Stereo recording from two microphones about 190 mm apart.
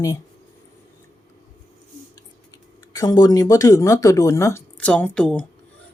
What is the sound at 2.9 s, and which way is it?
Speech, 20° left (ahead or behind).